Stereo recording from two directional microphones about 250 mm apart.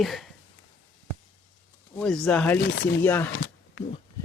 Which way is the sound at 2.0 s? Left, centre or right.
Centre.